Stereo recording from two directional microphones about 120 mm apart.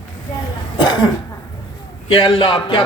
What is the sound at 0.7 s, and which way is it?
Cough, 35° left (ahead or behind).